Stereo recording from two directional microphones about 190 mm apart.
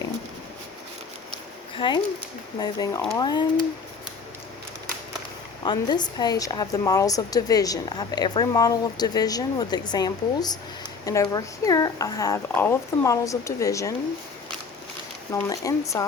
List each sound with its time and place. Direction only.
1.3 s a sound: 25° left (ahead or behind)
2.6 s a woman's voice: 20° left (ahead or behind)
5.6 s a woman's voice: 20° left (ahead or behind)
15.3 s speech: 15° left (ahead or behind)